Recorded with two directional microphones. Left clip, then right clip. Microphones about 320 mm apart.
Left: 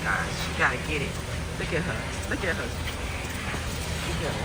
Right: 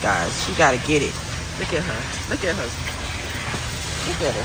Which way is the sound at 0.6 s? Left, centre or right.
Centre.